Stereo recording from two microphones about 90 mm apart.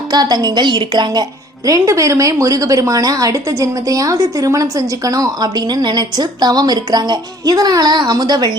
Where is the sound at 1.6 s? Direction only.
40° right (ahead or behind).